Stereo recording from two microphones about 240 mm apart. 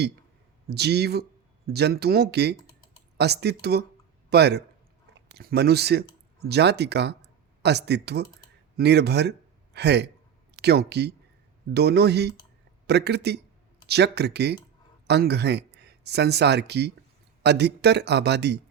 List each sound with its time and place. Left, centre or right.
0.7 s speech: right